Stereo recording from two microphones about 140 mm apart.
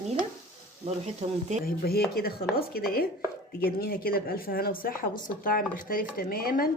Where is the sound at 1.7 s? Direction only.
90° left.